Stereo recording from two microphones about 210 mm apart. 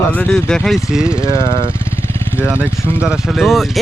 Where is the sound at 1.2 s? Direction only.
20° right (ahead or behind).